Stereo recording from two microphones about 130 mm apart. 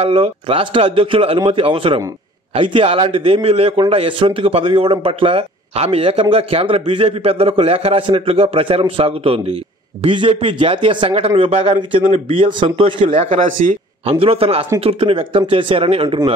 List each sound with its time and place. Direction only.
0.0 s a man's voice: 50° right (ahead or behind)
14.2 s a man's voice: 50° right (ahead or behind)